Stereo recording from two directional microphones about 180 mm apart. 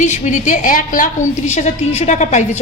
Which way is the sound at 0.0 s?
40° left (ahead or behind).